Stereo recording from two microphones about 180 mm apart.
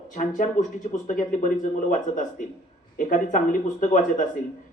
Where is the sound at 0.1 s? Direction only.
45° left (ahead or behind).